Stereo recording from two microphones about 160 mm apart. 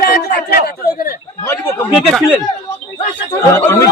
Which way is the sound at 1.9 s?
5° right (ahead or behind).